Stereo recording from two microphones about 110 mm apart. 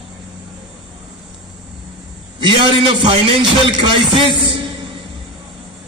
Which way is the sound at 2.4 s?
50° right (ahead or behind).